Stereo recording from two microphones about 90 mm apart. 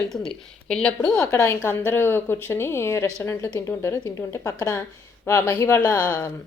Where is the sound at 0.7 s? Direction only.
10° left (ahead or behind).